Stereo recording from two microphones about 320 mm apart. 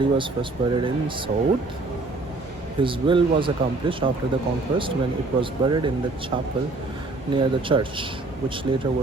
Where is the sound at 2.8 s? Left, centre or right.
Centre.